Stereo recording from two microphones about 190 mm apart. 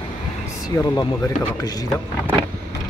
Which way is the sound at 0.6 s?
20° left (ahead or behind).